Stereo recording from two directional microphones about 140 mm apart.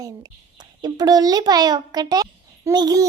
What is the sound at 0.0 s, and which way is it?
A child's voice, 30° right (ahead or behind).